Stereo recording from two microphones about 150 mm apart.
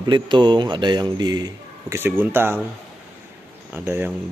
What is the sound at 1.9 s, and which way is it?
Speech, 15° right (ahead or behind).